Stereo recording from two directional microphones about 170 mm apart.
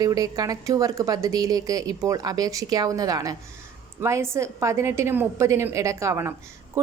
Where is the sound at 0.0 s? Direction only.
20° right (ahead or behind).